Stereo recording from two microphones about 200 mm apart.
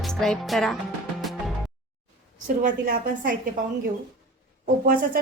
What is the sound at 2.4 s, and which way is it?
Speech, 40° right (ahead or behind).